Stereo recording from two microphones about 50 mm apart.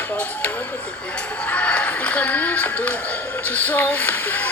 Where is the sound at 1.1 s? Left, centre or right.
Left.